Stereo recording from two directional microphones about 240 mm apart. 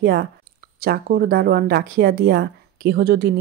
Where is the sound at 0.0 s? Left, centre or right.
Right.